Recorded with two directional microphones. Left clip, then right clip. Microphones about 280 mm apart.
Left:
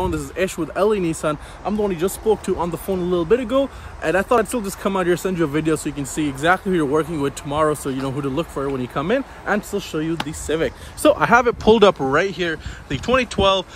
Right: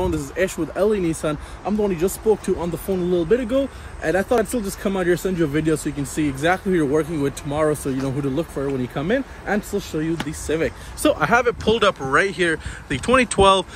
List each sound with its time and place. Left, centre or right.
0.0 s speech: centre
11.0 s speech: left
11.6 s speech: left